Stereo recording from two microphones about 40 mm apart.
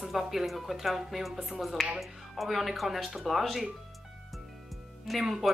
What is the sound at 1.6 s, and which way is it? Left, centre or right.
Speech, centre.